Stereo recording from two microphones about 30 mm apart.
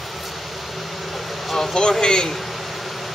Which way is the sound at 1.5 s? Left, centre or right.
Centre.